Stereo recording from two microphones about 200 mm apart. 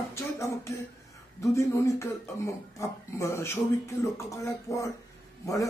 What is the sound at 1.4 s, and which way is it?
A man's voice, 15° left (ahead or behind).